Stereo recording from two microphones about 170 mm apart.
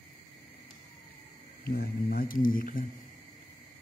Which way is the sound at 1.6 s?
65° left (ahead or behind).